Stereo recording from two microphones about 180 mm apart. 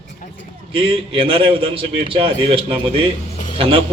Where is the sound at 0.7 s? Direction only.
30° right (ahead or behind).